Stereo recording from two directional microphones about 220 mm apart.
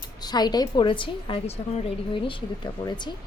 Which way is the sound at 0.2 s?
20° left (ahead or behind).